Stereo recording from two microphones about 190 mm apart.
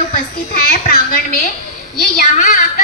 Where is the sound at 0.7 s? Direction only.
50° left (ahead or behind).